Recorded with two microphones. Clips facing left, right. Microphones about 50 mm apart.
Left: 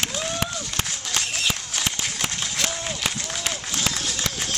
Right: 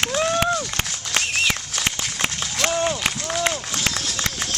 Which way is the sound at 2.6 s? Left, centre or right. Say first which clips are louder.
Right 10 dB; right.